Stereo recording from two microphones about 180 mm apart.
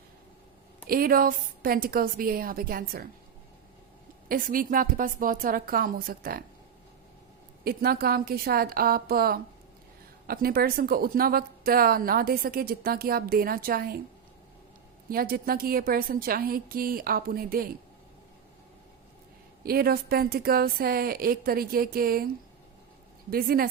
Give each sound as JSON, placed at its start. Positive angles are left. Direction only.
{"t": 0.9, "sound": "a woman's voice", "side_deg": -55}
{"t": 4.3, "sound": "a woman's voice", "side_deg": -50}
{"t": 7.6, "sound": "a woman's voice", "side_deg": -55}
{"t": 15.1, "sound": "a woman's voice", "side_deg": -55}
{"t": 19.6, "sound": "a woman's voice", "side_deg": -55}
{"t": 23.3, "sound": "a woman's voice", "side_deg": -55}